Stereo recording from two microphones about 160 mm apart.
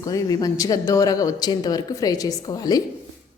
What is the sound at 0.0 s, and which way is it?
A woman's voice, 20° left (ahead or behind).